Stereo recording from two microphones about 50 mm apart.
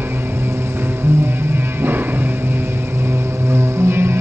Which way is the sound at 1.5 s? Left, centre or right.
Right.